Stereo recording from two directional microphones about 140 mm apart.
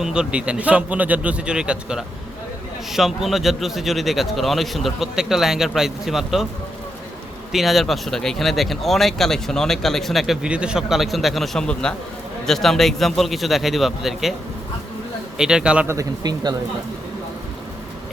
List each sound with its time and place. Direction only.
0.0 s a man's voice: 5° right (ahead or behind)
7.5 s speech: centre (ahead or behind)
15.4 s a man's voice: 5° right (ahead or behind)
15.9 s speech: 25° right (ahead or behind)